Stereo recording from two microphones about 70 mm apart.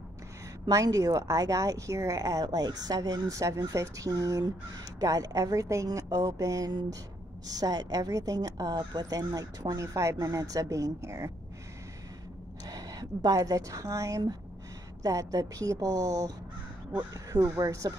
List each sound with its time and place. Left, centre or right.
0.7 s a woman's voice: right
12.6 s a woman's voice: right
17.6 s speech: right